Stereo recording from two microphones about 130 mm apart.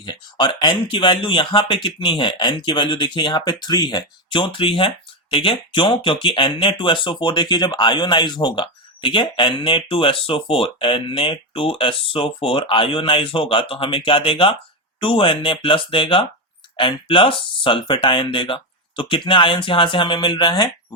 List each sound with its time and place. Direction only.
0.0 s speech: 35° left (ahead or behind)